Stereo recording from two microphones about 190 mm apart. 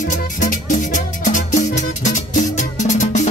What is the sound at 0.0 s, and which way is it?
Music, 45° left (ahead or behind).